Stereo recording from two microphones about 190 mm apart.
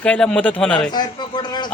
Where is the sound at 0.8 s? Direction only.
25° left (ahead or behind).